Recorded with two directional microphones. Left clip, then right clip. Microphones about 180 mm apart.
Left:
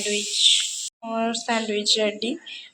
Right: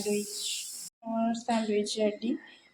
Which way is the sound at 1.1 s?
5° left (ahead or behind).